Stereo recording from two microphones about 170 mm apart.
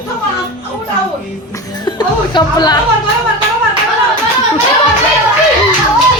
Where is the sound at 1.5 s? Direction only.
25° left (ahead or behind).